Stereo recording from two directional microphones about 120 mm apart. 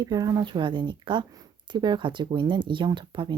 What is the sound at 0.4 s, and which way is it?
Speech, 40° right (ahead or behind).